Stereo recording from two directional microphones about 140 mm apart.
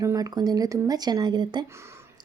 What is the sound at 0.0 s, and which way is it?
Speech, 25° right (ahead or behind).